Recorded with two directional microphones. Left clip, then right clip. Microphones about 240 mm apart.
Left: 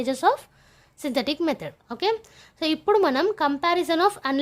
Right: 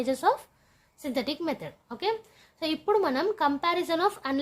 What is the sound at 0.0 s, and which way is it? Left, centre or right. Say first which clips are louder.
A woman's voice: left 4 dB; left.